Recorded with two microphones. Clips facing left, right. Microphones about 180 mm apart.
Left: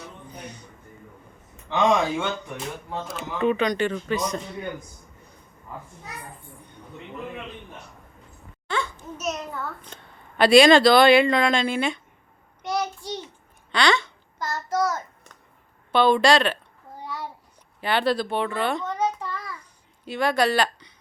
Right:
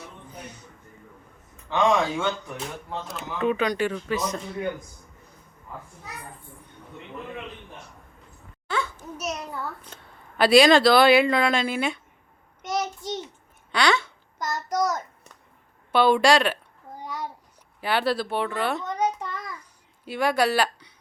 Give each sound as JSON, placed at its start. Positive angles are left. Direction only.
{"t": 0.0, "sound": "music", "side_deg": -5}
{"t": 3.1, "sound": "a man's voice", "side_deg": 0}
{"t": 8.6, "sound": "a child's voice", "side_deg": -5}
{"t": 12.6, "sound": "child singing", "side_deg": -20}
{"t": 13.7, "sound": "speech", "side_deg": -10}
{"t": 14.3, "sound": "a child's voice", "side_deg": -20}
{"t": 17.0, "sound": "a sound", "side_deg": -15}
{"t": 17.7, "sound": "a man's voice", "side_deg": -5}
{"t": 18.9, "sound": "child singing", "side_deg": -20}
{"t": 20.1, "sound": "speech", "side_deg": -10}